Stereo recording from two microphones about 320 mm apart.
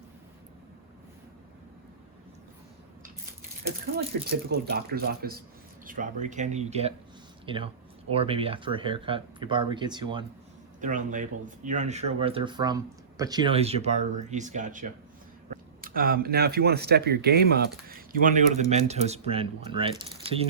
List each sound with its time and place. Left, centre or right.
4.4 s speech: right